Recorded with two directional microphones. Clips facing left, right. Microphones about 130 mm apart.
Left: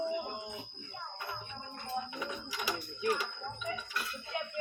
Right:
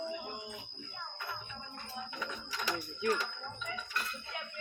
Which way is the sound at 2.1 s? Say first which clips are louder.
Left 2 dB; 10° left (ahead or behind).